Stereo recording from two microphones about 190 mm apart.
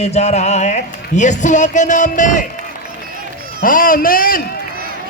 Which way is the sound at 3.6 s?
45° left (ahead or behind).